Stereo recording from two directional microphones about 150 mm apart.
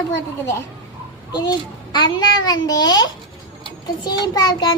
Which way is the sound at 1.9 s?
30° left (ahead or behind).